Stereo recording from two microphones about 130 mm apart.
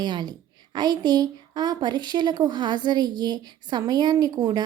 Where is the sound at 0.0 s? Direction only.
35° right (ahead or behind).